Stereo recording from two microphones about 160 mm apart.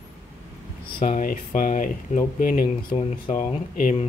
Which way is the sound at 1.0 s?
55° left (ahead or behind).